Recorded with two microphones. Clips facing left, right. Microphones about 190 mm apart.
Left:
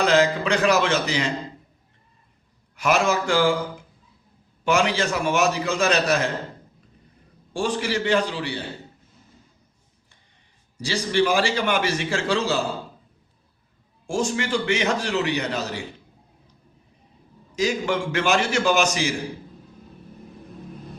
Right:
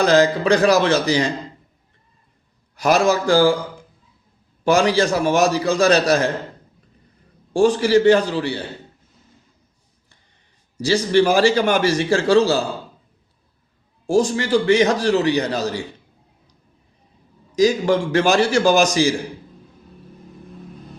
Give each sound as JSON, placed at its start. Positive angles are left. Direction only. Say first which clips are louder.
{"t": 0.0, "sound": "a man's voice", "louder": "right 4 dB", "side_deg": -40}
{"t": 2.7, "sound": "a man's voice", "louder": "right 4 dB", "side_deg": -35}
{"t": 4.6, "sound": "a man's voice", "louder": "right 5 dB", "side_deg": -35}
{"t": 7.5, "sound": "a man's voice", "louder": "right 10 dB", "side_deg": -40}
{"t": 10.8, "sound": "a man's voice", "louder": "right 6 dB", "side_deg": -40}
{"t": 14.1, "sound": "a man's voice", "louder": "right 7 dB", "side_deg": -35}
{"t": 17.5, "sound": "a man's voice", "louder": "right 7 dB", "side_deg": -35}